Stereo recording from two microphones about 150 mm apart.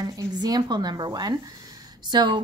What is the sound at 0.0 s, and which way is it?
Speech, 25° right (ahead or behind).